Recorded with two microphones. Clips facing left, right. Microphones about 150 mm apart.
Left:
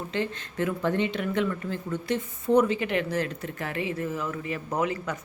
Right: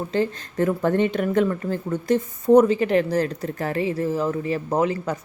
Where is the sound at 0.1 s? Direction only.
40° right (ahead or behind).